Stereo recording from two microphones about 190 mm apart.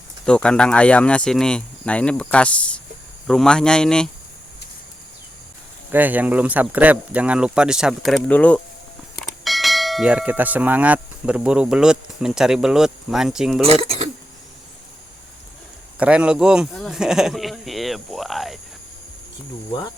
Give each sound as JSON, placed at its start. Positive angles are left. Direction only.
{"t": 0.3, "sound": "speech", "side_deg": 5}
{"t": 5.9, "sound": "speech", "side_deg": -10}
{"t": 9.1, "sound": "bell", "side_deg": 0}
{"t": 13.6, "sound": "speech", "side_deg": -30}
{"t": 16.0, "sound": "speech", "side_deg": -5}